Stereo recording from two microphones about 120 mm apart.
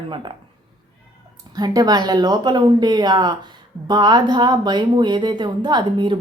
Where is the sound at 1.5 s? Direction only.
35° right (ahead or behind).